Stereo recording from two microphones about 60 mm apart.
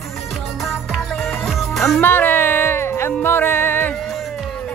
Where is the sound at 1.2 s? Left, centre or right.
Centre.